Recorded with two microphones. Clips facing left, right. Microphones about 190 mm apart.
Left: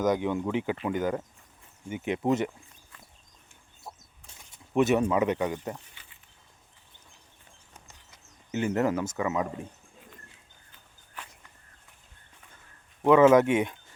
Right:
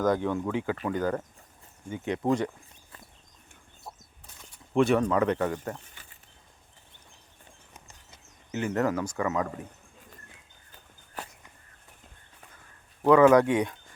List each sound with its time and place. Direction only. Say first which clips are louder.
0.0 s speech: even; 20° left (ahead or behind)
3.9 s bird flight: even; centre (ahead or behind)
4.9 s speech: even; 10° left (ahead or behind)
5.9 s a sound: right 3 dB; 45° right (ahead or behind)
8.5 s speech: left 1 dB; 20° left (ahead or behind)
11.2 s a sound: right 5 dB; 40° right (ahead or behind)
13.1 s speech: even; 20° left (ahead or behind)